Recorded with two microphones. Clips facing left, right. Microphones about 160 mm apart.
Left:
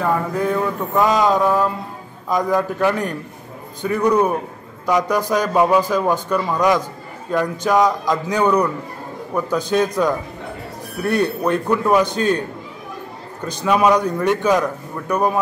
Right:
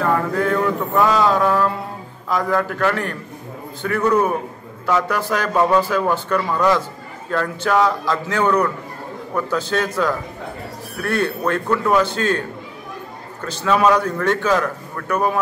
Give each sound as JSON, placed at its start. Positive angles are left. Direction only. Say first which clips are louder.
{"t": 0.0, "sound": "speech", "louder": "right 1 dB", "side_deg": 15}
{"t": 11.0, "sound": "speech", "louder": "left 2 dB", "side_deg": 15}